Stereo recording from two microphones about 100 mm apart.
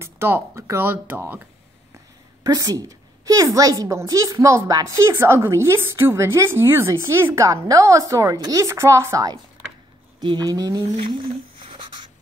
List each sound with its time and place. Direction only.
0.0 s speech: 25° right (ahead or behind)
2.4 s a woman's voice: 35° right (ahead or behind)
10.2 s a woman's voice: 45° right (ahead or behind)